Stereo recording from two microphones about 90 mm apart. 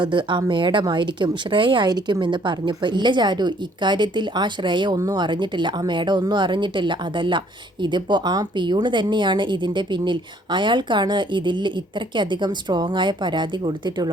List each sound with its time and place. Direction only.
0.0 s speech: 60° right (ahead or behind)